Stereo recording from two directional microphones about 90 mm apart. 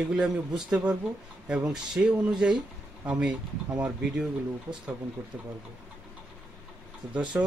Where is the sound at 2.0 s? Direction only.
20° right (ahead or behind).